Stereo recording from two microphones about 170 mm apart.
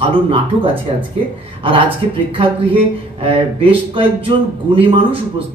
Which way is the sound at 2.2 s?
35° right (ahead or behind).